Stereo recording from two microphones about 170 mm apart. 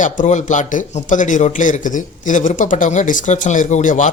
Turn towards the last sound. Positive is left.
turn(degrees=45)  # may be behind; listen again after turning